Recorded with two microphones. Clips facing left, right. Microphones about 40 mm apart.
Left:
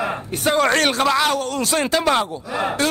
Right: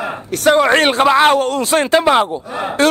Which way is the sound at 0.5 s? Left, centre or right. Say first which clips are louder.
Right 3 dB; right.